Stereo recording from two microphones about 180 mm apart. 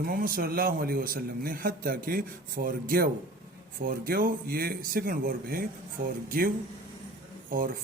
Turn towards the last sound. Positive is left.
turn(degrees=-50)  # may be behind; listen again after turning